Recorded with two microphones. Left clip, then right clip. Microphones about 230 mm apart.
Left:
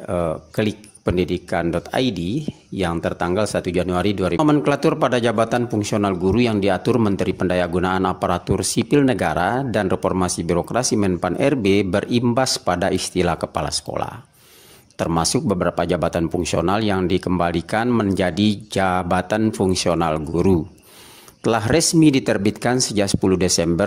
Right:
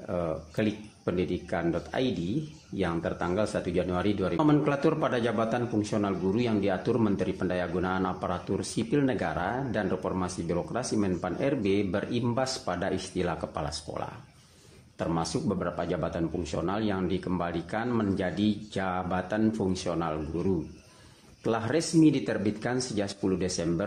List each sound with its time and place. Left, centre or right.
0.1 s speech: left